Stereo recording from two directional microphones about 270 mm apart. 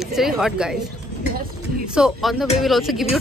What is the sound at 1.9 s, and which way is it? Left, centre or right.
A woman's voice, centre.